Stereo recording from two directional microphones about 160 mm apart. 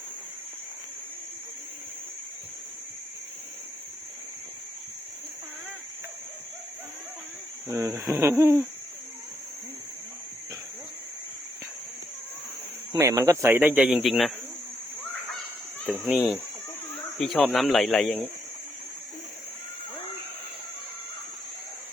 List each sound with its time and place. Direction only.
7.7 s speech: 20° right (ahead or behind)
12.9 s speech: 20° right (ahead or behind); by 14.3 s centre (ahead or behind)
16.0 s speech: 5° right (ahead or behind)